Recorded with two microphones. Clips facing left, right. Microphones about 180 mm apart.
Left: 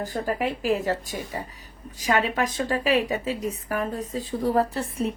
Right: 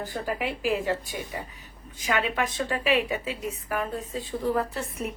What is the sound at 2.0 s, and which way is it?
A woman's voice, 40° left (ahead or behind).